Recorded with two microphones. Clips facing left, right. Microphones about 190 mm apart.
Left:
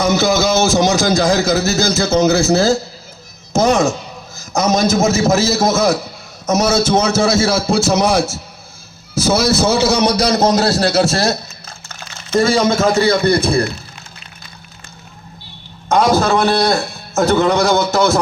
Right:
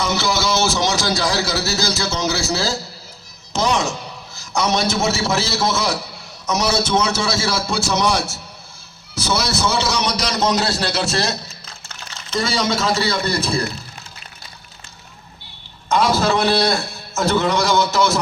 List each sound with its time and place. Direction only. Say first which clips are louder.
0.0 s a man's voice: left 7 dB; 45° left (ahead or behind)
3.5 s music: left 7 dB; 45° left (ahead or behind)
4.4 s a man's voice: left 5 dB; 45° left (ahead or behind)
15.9 s a man's voice: left 4 dB; 50° left (ahead or behind)